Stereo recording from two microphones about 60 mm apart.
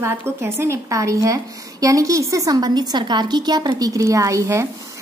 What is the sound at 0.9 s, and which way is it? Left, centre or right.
A woman's voice, right.